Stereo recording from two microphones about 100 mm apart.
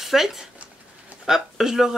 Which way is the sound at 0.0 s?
5° right (ahead or behind).